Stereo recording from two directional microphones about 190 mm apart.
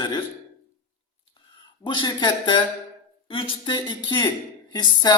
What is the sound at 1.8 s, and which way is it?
A woman's voice, 25° left (ahead or behind).